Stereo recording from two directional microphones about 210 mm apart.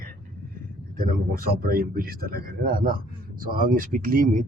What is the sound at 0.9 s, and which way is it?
Speech, 40° right (ahead or behind).